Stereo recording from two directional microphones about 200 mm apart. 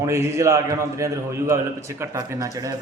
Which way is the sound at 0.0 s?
15° right (ahead or behind).